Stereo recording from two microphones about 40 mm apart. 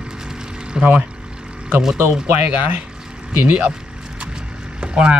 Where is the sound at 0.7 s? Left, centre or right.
Right.